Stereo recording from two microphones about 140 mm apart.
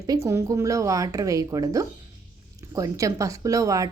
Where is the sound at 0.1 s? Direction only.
20° right (ahead or behind).